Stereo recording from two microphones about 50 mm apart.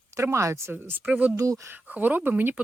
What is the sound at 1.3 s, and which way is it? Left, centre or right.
Speech, right.